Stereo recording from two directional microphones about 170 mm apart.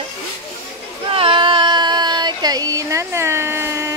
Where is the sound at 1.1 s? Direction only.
30° right (ahead or behind); by 3.9 s 15° right (ahead or behind).